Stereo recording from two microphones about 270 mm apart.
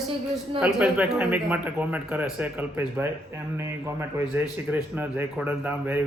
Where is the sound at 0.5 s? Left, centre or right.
Centre.